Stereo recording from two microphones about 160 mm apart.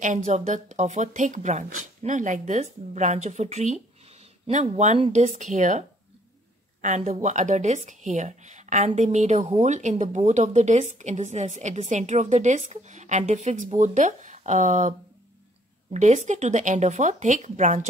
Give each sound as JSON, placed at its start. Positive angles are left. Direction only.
{"t": 0.0, "sound": "speech", "side_deg": -50}